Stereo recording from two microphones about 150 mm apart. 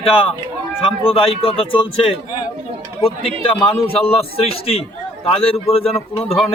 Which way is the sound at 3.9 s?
40° left (ahead or behind).